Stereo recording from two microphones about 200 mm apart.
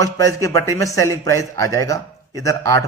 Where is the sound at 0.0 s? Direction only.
15° left (ahead or behind).